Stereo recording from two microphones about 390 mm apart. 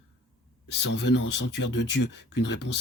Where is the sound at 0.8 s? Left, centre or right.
Left.